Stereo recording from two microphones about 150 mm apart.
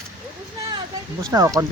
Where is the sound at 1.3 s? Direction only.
20° right (ahead or behind).